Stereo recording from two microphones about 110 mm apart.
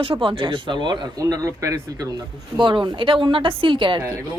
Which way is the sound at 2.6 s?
50° right (ahead or behind).